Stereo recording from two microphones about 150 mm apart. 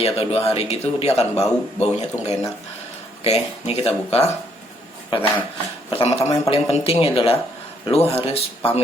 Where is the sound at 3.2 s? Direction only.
45° left (ahead or behind).